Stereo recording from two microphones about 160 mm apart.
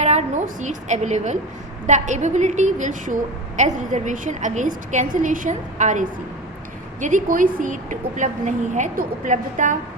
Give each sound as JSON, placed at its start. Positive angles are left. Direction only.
{"t": 0.0, "sound": "a woman's voice", "side_deg": -45}